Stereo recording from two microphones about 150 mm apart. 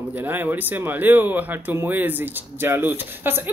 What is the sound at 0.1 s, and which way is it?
Speech, 10° right (ahead or behind).